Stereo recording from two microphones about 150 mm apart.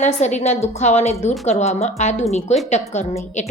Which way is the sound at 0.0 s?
50° left (ahead or behind).